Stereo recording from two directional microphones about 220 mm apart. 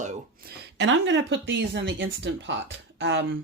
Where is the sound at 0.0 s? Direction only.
35° right (ahead or behind).